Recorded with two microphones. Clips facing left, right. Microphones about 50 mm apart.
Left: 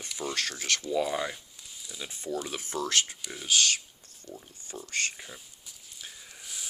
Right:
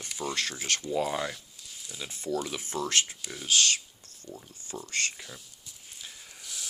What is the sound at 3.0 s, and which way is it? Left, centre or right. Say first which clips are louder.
Speech: even; centre.